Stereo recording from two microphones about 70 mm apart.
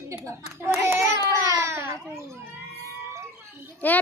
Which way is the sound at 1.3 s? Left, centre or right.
Right.